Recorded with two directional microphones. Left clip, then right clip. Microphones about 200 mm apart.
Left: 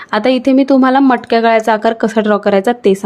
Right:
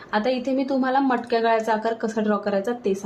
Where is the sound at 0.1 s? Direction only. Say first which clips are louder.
Left 11 dB; 45° left (ahead or behind).